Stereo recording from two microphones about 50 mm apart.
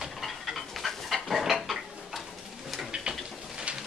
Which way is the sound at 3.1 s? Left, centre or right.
Centre.